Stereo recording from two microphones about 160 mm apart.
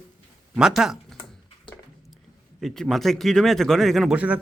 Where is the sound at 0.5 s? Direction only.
Centre (ahead or behind).